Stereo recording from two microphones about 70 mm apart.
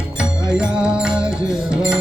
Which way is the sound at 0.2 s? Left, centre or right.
Centre.